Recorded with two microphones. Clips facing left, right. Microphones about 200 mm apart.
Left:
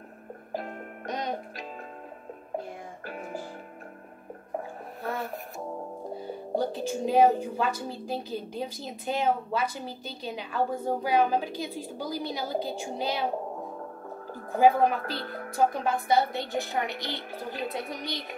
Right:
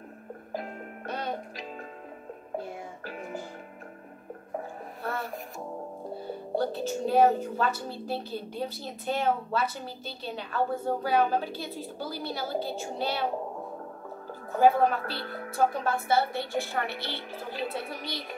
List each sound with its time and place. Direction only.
1.0 s music: 15° left (ahead or behind)
6.1 s a woman's voice: 15° left (ahead or behind)
14.5 s a woman's voice: 15° left (ahead or behind)